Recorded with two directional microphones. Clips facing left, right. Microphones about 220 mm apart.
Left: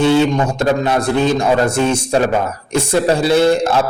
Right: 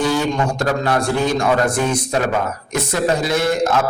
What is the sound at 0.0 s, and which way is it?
A man's voice, 25° left (ahead or behind).